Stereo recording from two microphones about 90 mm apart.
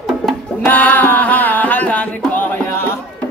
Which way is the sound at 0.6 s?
20° left (ahead or behind).